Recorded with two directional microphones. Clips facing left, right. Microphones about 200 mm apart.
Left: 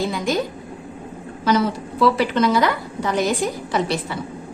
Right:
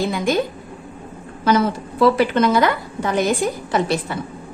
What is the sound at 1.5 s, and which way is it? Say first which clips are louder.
A woman's voice: right 2 dB; 50° right (ahead or behind).